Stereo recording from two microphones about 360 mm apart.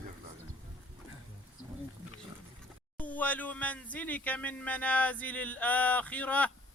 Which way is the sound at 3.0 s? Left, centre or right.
Centre.